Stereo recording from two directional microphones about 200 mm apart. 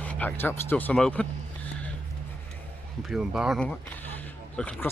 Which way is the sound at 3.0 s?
Centre (ahead or behind).